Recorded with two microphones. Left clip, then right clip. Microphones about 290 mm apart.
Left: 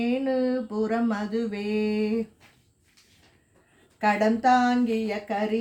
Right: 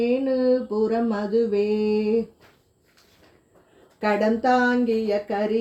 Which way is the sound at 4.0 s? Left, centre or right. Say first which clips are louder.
Right 1 dB; left.